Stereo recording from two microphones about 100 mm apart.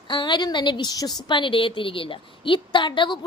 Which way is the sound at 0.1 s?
50° left (ahead or behind).